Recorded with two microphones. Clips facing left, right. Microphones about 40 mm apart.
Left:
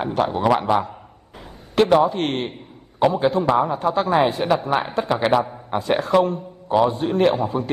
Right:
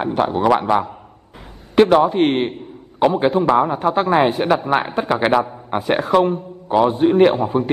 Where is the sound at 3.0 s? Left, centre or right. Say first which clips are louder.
Right 2 dB; right.